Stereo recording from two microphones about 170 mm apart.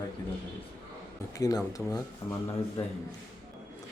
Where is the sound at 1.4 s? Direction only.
20° left (ahead or behind).